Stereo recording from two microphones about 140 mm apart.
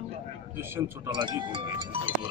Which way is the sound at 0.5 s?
15° right (ahead or behind).